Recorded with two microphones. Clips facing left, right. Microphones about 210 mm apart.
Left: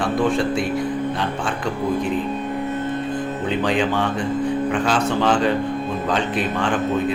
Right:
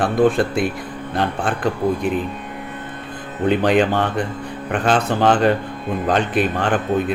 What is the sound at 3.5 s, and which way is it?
Speech, 60° right (ahead or behind).